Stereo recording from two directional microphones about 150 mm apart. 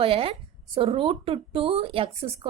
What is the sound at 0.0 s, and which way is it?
Speech, 40° right (ahead or behind).